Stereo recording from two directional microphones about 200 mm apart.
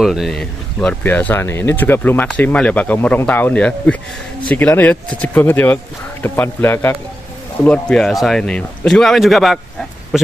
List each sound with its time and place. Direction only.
0.0 s a man's voice: centre (ahead or behind)